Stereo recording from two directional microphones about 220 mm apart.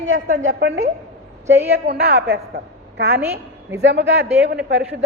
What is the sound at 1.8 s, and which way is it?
A woman's voice, 50° right (ahead or behind).